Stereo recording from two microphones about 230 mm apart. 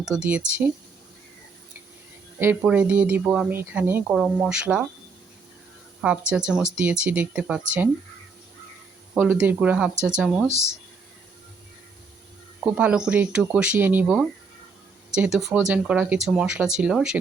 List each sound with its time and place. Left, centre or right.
0.0 s speech: centre
2.4 s speech: centre
6.0 s speech: centre
9.1 s speech: centre
12.6 s speech: centre